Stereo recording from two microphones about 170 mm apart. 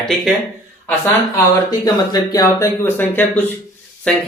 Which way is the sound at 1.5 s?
20° left (ahead or behind).